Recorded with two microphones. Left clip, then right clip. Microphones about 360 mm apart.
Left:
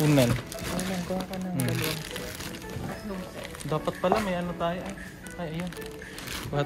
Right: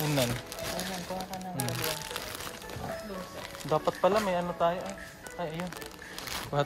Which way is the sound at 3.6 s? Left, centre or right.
Centre.